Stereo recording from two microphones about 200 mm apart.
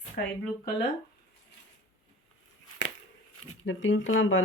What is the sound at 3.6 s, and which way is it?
Speech, 70° left (ahead or behind).